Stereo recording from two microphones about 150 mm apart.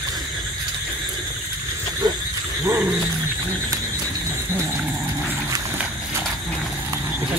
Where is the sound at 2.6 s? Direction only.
15° right (ahead or behind).